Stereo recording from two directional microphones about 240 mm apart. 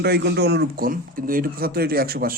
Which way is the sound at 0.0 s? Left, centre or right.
Right.